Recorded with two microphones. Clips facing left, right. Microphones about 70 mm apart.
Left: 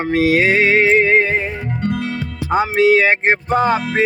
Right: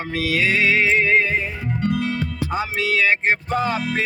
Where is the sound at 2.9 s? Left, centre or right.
Left.